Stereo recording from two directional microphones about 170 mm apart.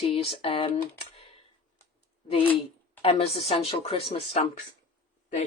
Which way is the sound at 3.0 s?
35° left (ahead or behind).